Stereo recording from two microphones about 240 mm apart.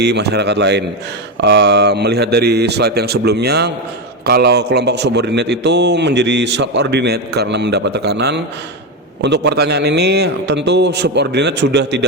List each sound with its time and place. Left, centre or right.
0.0 s a man's voice: right